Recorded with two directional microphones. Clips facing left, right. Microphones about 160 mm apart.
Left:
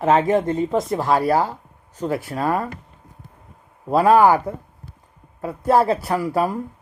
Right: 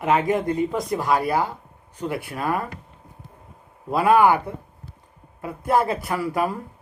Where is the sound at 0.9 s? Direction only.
40° left (ahead or behind).